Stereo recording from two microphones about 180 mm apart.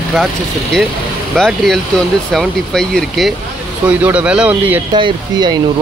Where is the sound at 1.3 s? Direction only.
Centre (ahead or behind).